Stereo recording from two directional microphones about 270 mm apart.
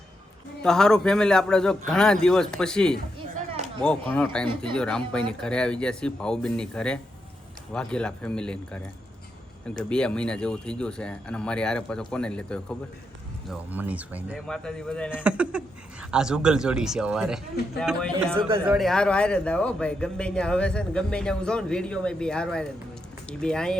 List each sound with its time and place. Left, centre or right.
0.6 s speech: centre
3.5 s a sound: right
3.8 s speech: centre
9.9 s speech: centre